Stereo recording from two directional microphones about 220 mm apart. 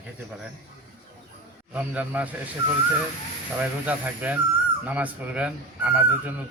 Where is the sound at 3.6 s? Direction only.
5° right (ahead or behind).